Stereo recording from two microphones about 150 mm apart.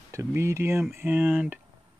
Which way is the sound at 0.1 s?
20° right (ahead or behind).